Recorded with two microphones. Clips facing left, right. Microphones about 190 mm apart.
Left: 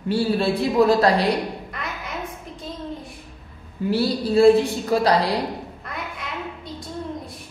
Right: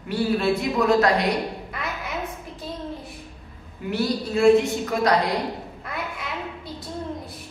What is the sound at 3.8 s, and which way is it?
A woman's voice, 30° left (ahead or behind).